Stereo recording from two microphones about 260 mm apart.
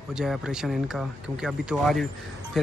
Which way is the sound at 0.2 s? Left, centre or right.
Centre.